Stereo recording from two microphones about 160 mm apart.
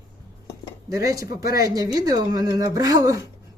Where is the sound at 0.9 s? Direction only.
20° right (ahead or behind).